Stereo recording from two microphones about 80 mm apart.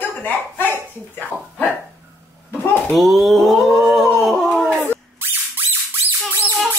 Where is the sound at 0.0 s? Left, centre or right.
Left.